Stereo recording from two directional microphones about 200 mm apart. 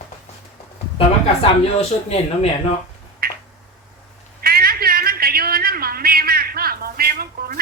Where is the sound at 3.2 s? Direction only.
50° right (ahead or behind).